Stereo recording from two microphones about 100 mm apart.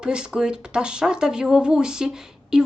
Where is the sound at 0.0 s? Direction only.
10° right (ahead or behind).